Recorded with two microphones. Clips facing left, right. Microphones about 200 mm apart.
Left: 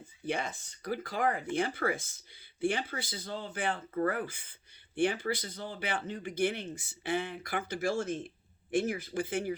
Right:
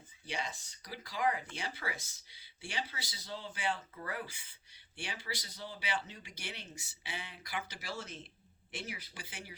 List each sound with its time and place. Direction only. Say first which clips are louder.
0.3 s speech: left 7 dB; 55° left (ahead or behind)